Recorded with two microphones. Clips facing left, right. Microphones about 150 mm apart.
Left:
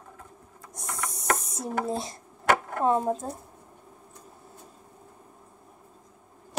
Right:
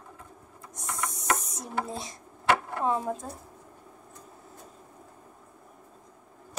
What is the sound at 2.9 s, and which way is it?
Speech, 25° left (ahead or behind).